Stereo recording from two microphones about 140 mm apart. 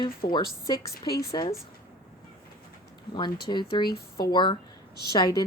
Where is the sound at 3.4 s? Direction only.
35° left (ahead or behind).